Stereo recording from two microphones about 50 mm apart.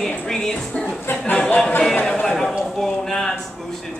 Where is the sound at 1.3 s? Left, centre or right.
Left.